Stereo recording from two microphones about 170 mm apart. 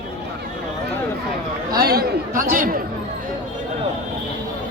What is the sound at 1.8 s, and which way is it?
Speech, 65° right (ahead or behind).